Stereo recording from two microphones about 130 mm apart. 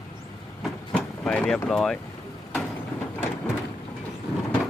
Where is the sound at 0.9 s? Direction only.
5° left (ahead or behind).